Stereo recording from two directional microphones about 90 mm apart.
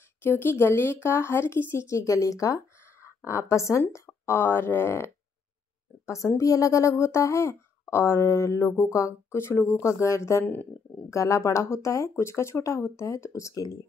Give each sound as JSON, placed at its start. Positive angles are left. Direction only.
{"t": 0.2, "sound": "speech", "side_deg": 25}
{"t": 10.4, "sound": "speech", "side_deg": 20}
{"t": 11.1, "sound": "speech", "side_deg": 35}